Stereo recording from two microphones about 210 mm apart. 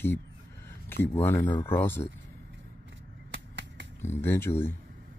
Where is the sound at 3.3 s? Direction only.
55° right (ahead or behind).